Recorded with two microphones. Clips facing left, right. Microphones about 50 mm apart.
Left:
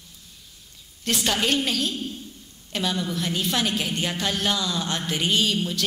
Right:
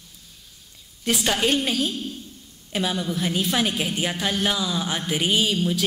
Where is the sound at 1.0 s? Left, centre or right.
Centre.